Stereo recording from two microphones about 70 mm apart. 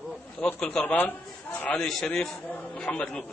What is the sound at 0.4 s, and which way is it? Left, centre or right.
A man's voice, centre.